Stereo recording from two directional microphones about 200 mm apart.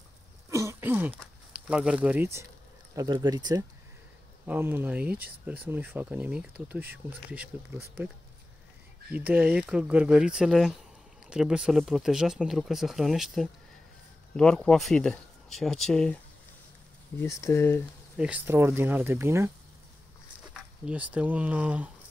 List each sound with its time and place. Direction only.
0.5 s throat clearing: 15° right (ahead or behind)
1.7 s speech: 5° right (ahead or behind)
9.1 s speech: 5° right (ahead or behind)
17.2 s speech: 15° left (ahead or behind)
18.1 s speech: 5° right (ahead or behind)
20.5 s speech: 5° right (ahead or behind)